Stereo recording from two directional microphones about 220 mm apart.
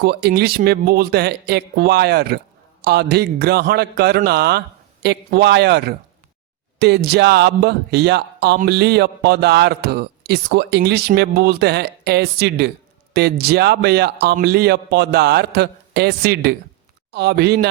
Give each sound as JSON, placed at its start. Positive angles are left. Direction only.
{"t": 0.0, "sound": "speech", "side_deg": -45}